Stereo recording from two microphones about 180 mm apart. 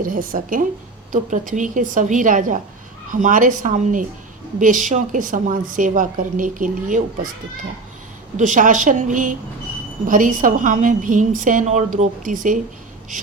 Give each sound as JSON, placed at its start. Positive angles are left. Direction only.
{"t": 0.0, "sound": "a woman's voice", "side_deg": -50}
{"t": 8.4, "sound": "a woman's voice", "side_deg": -45}